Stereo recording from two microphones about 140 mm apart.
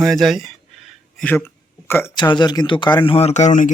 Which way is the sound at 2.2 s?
30° left (ahead or behind).